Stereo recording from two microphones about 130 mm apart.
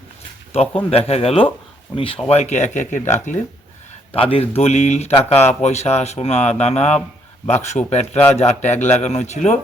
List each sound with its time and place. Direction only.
0.5 s speech: 55° left (ahead or behind)
4.1 s speech: 45° left (ahead or behind); by 9.6 s 60° left (ahead or behind)